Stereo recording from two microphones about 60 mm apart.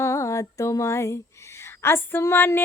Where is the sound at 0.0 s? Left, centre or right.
Left.